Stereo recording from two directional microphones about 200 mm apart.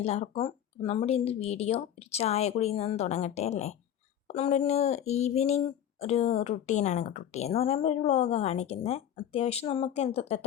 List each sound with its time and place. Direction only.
0.0 s speech: 30° left (ahead or behind)